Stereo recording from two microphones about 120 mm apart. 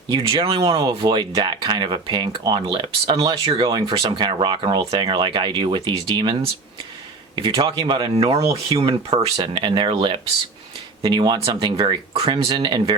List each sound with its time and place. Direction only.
0.1 s speech: 40° right (ahead or behind)
3.7 s speech: 40° right (ahead or behind)
7.3 s speech: 40° right (ahead or behind)
8.1 s speech: 55° right (ahead or behind)
9.2 s speech: 40° right (ahead or behind)